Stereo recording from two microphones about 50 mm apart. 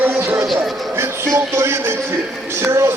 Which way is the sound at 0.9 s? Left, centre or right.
Right.